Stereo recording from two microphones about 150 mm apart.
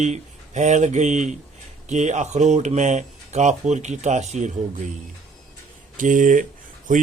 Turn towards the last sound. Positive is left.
turn(degrees=-60)  # may be behind; listen again after turning